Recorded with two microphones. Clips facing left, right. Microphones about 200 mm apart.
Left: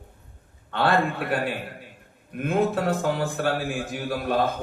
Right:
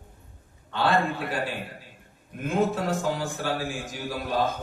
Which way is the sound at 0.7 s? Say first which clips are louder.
Left 2 dB; 60° left (ahead or behind).